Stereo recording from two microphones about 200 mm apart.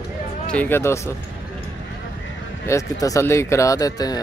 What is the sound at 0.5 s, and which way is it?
Speech, 10° left (ahead or behind).